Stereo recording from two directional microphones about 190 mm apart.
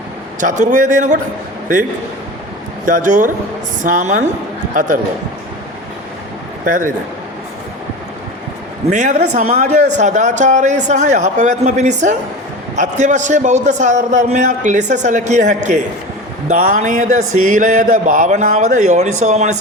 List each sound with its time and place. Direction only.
0.3 s a man's voice: 40° right (ahead or behind)
2.8 s speech: 45° right (ahead or behind)
8.9 s a man's voice: 40° right (ahead or behind)